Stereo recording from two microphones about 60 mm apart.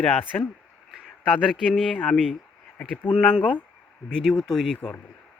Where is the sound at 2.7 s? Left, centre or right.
Centre.